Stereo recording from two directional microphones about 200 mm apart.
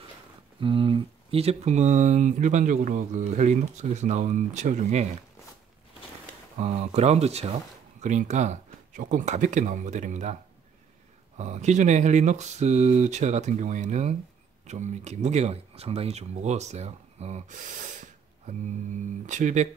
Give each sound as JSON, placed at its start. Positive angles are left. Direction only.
{"t": 0.6, "sound": "speech", "side_deg": -25}
{"t": 6.6, "sound": "speech", "side_deg": -30}
{"t": 11.3, "sound": "speech", "side_deg": -35}
{"t": 19.2, "sound": "speech", "side_deg": -40}